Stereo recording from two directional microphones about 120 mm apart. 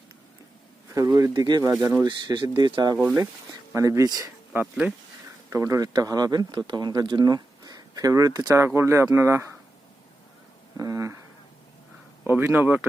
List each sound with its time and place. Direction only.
0.9 s speech: 30° right (ahead or behind)
1.5 s speech: 35° right (ahead or behind)
4.5 s speech: 10° right (ahead or behind)
5.5 s speech: 25° right (ahead or behind)
10.8 s a sound: 25° right (ahead or behind)
12.2 s speech: 20° right (ahead or behind)